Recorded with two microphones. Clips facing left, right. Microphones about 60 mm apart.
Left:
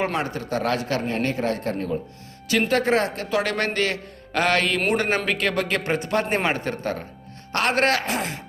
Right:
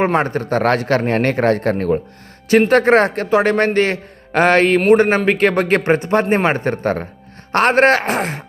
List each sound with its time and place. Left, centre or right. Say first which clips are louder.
0.0 s a man's voice: right 9 dB; right
2.5 s a man's voice: right 9 dB; right
3.2 s a man's voice: right 9 dB; right